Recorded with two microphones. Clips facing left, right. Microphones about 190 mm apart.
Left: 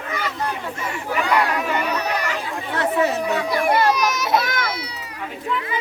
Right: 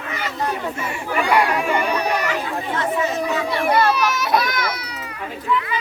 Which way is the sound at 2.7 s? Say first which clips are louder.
Left 3 dB; 65° left (ahead or behind).